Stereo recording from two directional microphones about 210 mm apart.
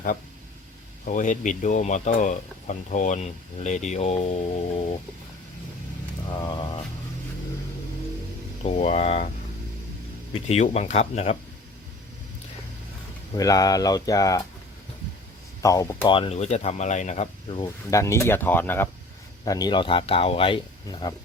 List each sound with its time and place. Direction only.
1.0 s speech: 40° left (ahead or behind)
6.3 s a sound: 20° left (ahead or behind)
8.6 s speech: 35° left (ahead or behind)
10.3 s speech: 30° left (ahead or behind)
13.3 s speech: 15° left (ahead or behind)
15.6 s speech: 15° left (ahead or behind)